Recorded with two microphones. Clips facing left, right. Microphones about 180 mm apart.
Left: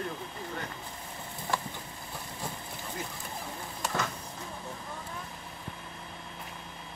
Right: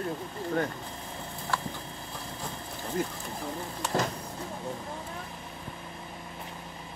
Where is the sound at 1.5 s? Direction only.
15° left (ahead or behind).